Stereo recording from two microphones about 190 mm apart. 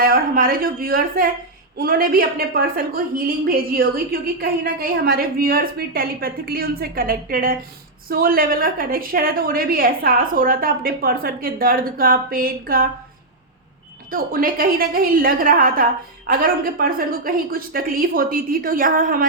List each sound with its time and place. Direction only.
0.0 s a woman's voice: 50° right (ahead or behind)
14.1 s a woman's voice: 50° right (ahead or behind)